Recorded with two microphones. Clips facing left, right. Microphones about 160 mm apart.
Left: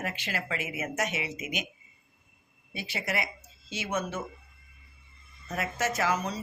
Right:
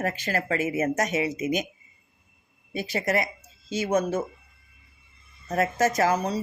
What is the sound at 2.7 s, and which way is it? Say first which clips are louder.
Speech: right 8 dB; 40° right (ahead or behind).